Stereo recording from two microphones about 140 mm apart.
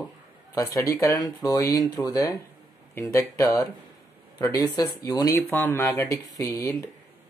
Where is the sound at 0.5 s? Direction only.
20° left (ahead or behind).